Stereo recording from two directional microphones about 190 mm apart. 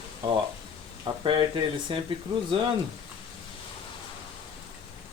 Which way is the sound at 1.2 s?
25° right (ahead or behind).